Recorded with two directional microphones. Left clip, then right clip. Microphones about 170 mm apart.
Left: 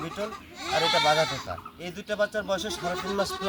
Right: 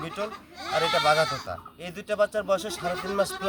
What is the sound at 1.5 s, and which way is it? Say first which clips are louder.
Speech: even; 10° right (ahead or behind).